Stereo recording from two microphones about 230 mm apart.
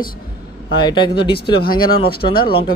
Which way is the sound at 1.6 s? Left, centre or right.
Left.